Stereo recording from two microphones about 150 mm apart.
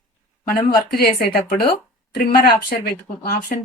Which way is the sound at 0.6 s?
80° left.